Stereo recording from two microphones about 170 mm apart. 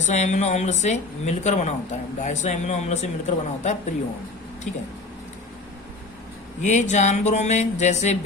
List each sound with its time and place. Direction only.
0.0 s speech: 45° left (ahead or behind)
6.6 s speech: 45° left (ahead or behind)